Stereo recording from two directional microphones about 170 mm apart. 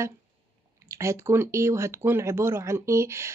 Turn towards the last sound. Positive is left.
turn(degrees=-15)  # may be behind; listen again after turning